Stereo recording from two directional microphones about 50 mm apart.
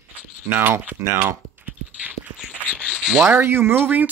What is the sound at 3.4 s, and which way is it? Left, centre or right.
Speech, right.